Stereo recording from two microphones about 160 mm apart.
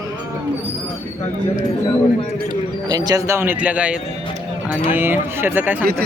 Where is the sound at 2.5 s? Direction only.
25° right (ahead or behind).